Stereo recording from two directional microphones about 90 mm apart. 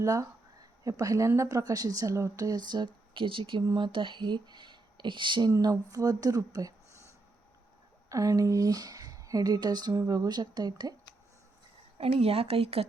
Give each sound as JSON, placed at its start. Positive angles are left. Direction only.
{"t": 0.0, "sound": "speech", "side_deg": -35}
{"t": 5.5, "sound": "speech", "side_deg": -35}
{"t": 8.1, "sound": "speech", "side_deg": -40}
{"t": 11.9, "sound": "speech", "side_deg": -90}